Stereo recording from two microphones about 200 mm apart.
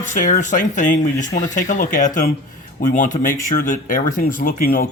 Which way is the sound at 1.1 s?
15° left (ahead or behind).